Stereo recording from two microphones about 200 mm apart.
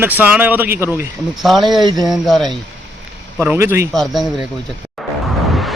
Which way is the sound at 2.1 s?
Centre (ahead or behind).